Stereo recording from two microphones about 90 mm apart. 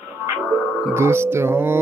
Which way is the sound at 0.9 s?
25° right (ahead or behind).